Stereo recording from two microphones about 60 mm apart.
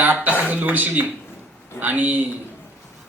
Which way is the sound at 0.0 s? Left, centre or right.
Right.